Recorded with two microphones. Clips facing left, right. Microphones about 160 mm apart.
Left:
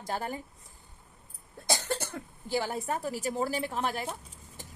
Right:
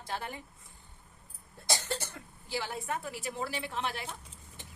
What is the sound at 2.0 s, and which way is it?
A woman's voice, 50° left (ahead or behind).